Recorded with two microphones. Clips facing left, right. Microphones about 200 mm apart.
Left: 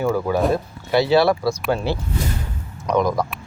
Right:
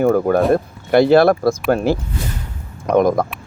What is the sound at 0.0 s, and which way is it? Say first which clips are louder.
Speech: right 5 dB; 55° right (ahead or behind).